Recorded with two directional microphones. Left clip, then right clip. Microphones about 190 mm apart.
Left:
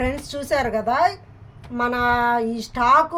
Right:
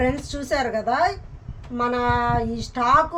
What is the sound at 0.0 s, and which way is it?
Speech, 40° left (ahead or behind).